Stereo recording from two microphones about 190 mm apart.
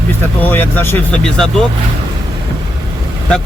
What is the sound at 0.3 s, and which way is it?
Speech, 10° left (ahead or behind).